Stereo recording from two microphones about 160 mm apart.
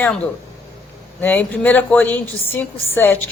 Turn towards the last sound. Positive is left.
turn(degrees=15)  # may be behind; listen again after turning